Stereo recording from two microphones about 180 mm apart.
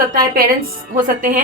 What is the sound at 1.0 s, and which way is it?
Speech, 50° right (ahead or behind).